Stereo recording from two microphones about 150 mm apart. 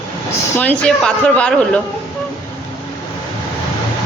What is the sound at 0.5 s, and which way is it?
A woman's voice, 10° left (ahead or behind).